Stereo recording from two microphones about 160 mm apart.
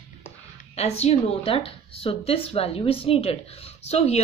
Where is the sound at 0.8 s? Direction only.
40° left (ahead or behind).